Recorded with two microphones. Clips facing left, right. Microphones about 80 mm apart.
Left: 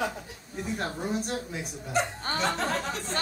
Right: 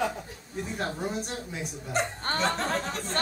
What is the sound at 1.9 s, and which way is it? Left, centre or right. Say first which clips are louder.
Speech: even; right.